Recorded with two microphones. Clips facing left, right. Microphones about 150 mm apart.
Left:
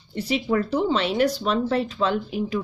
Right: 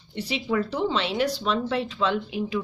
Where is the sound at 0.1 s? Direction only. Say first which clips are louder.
Left 3 dB; 45° left (ahead or behind).